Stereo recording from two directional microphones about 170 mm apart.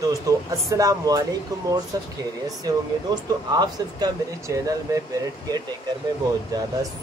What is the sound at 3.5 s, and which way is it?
Speech, 25° right (ahead or behind).